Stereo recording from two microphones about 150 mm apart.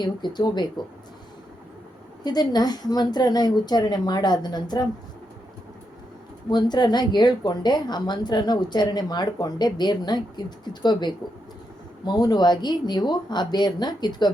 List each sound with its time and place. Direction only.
0.0 s a woman's voice: 30° left (ahead or behind)
2.2 s a woman's voice: 25° left (ahead or behind)
6.5 s a woman's voice: 30° left (ahead or behind)